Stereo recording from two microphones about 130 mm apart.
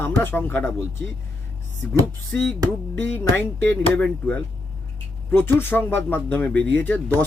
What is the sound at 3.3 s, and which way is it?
A man's voice, 15° left (ahead or behind).